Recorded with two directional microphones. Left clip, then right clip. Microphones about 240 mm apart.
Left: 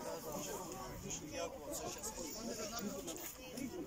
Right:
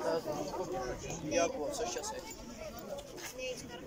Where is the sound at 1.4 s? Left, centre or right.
Right.